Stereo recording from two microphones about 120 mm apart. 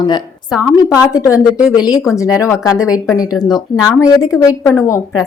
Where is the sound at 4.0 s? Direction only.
25° left (ahead or behind).